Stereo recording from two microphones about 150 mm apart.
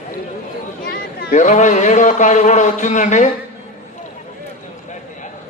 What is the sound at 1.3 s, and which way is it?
A man's voice, 50° left (ahead or behind).